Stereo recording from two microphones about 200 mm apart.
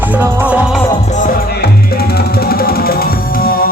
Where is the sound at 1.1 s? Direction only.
40° left (ahead or behind).